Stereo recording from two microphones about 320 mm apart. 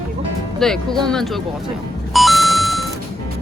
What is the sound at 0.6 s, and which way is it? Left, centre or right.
Speech, centre.